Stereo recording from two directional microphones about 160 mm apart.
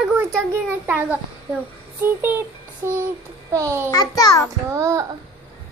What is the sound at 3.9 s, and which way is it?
Speech, 20° left (ahead or behind).